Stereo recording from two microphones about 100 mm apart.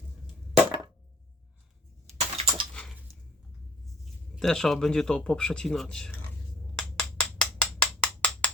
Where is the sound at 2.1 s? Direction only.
90° right.